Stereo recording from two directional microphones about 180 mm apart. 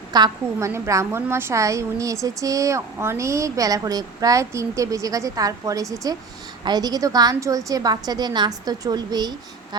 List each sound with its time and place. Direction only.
0.1 s a woman's voice: 20° right (ahead or behind)